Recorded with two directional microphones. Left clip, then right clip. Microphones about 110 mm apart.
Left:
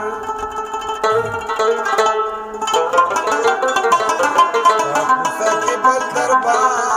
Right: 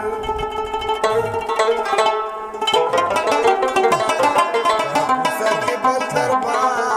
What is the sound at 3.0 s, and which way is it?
Music, 30° right (ahead or behind).